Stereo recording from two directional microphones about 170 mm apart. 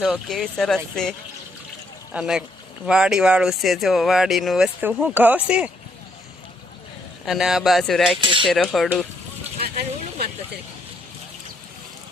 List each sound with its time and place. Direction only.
0.0 s speech: centre (ahead or behind)
2.1 s speech: 5° right (ahead or behind)
7.3 s speech: centre (ahead or behind)
8.2 s speech: 30° right (ahead or behind)
8.4 s speech: centre (ahead or behind)
9.6 s vehicle: 65° right (ahead or behind)